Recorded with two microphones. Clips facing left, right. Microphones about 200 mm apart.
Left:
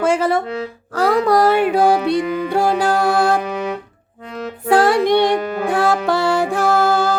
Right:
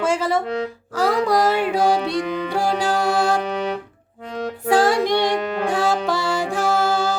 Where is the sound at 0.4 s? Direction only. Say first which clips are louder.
Right 1 dB; 5° left (ahead or behind).